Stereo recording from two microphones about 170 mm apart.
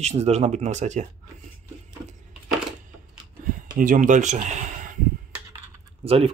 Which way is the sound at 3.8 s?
50° right (ahead or behind).